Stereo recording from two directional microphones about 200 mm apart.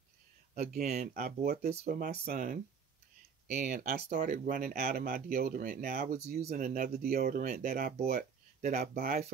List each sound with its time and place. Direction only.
0.6 s speech: 40° right (ahead or behind)